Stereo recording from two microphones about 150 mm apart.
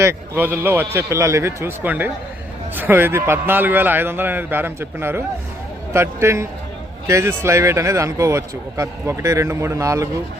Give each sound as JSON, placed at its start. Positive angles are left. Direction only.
{"t": 0.0, "sound": "a man's voice", "side_deg": -15}